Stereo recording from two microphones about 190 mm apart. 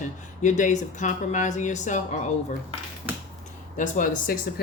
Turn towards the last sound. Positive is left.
turn(degrees=45)  # may be behind; listen again after turning